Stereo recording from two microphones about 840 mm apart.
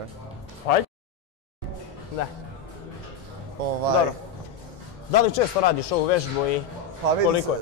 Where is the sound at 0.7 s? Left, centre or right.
Left.